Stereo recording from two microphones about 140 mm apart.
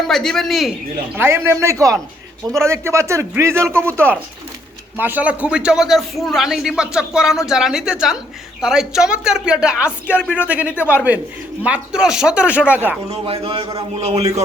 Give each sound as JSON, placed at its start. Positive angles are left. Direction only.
{"t": 0.1, "sound": "a man's voice", "side_deg": 5}
{"t": 1.1, "sound": "a man's voice", "side_deg": -15}
{"t": 13.1, "sound": "a man's voice", "side_deg": -45}